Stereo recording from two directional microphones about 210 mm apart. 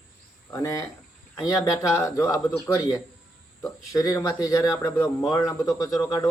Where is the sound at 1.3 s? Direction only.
Centre (ahead or behind).